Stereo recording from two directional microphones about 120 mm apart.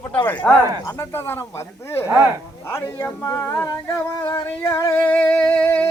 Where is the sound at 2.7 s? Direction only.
25° left (ahead or behind).